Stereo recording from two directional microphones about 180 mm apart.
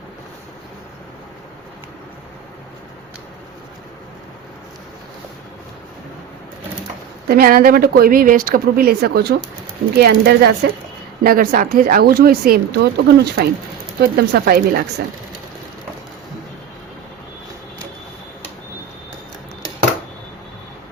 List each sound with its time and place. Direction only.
7.3 s speech: 55° right (ahead or behind)
11.2 s speech: 55° right (ahead or behind)